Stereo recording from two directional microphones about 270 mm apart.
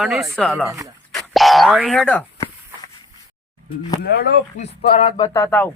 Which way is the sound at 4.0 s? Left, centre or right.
Left.